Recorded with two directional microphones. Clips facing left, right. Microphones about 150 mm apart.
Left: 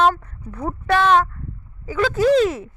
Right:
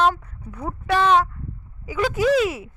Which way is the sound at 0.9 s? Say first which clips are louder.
Left 2 dB; 5° right (ahead or behind).